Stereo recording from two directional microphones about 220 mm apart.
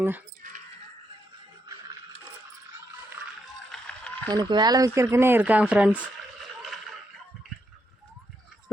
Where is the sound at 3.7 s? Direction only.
5° left (ahead or behind).